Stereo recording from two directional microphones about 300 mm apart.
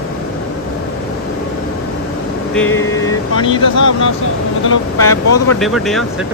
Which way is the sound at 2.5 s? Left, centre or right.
Centre.